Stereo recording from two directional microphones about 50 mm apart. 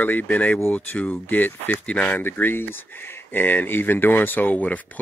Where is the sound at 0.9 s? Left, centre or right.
Left.